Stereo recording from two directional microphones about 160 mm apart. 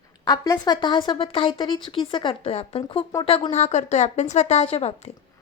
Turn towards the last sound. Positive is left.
turn(degrees=40)  # may be behind; listen again after turning